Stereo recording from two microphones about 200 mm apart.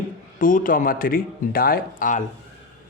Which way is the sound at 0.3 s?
40° left (ahead or behind).